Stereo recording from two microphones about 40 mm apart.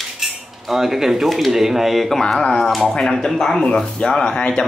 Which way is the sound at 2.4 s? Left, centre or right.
Centre.